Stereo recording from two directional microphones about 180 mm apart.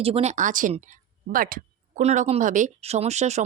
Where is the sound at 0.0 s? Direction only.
35° right (ahead or behind).